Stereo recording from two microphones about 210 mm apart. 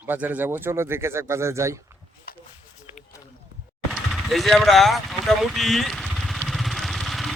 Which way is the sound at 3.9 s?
Centre (ahead or behind).